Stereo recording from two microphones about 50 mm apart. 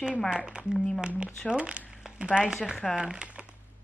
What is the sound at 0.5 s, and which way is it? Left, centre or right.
Speech, centre.